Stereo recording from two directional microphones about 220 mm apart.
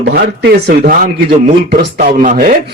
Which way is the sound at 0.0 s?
50° right (ahead or behind).